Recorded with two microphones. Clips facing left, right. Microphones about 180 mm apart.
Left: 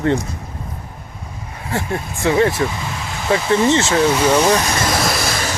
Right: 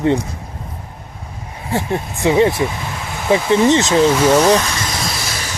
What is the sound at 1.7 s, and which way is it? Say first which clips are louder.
Speech: right 3 dB; 20° right (ahead or behind).